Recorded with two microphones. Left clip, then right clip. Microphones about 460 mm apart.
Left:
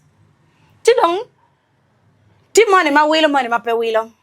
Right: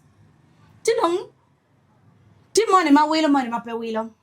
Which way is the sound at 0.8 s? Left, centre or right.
Left.